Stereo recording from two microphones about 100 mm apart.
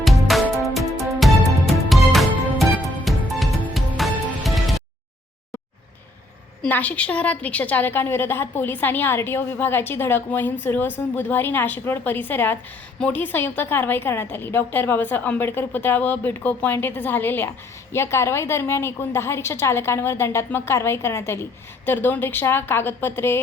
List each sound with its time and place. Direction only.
0.6 s music: centre (ahead or behind)
6.7 s a woman's voice: 15° left (ahead or behind)